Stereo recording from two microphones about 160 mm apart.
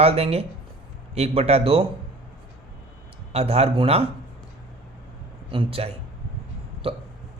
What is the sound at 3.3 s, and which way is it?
Speech, 40° right (ahead or behind).